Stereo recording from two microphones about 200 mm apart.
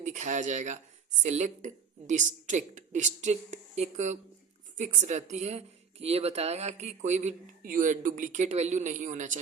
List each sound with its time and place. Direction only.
0.0 s speech: 35° right (ahead or behind)